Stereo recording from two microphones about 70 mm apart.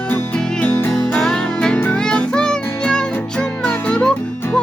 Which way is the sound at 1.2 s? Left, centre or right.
Centre.